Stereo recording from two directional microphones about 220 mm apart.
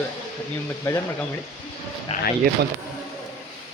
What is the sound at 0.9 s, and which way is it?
Speech, 10° left (ahead or behind).